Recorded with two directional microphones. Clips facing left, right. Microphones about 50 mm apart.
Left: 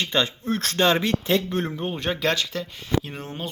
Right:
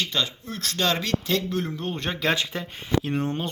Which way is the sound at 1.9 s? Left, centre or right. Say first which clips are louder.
Left 3 dB; centre.